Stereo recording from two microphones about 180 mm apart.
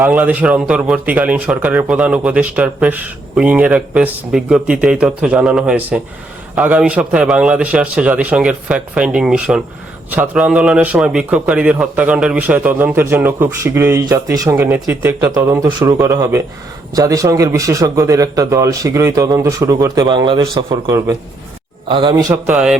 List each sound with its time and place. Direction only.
0.0 s a man's voice: 10° right (ahead or behind); by 22.1 s 30° right (ahead or behind)
22.1 s speech: 15° right (ahead or behind)
22.5 s a sound: 5° right (ahead or behind)